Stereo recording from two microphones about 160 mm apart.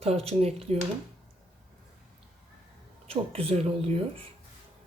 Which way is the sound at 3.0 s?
40° right (ahead or behind).